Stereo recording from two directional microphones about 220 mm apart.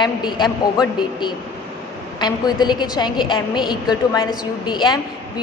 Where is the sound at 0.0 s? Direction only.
20° left (ahead or behind).